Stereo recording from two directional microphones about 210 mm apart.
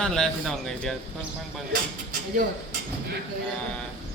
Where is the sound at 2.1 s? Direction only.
40° right (ahead or behind).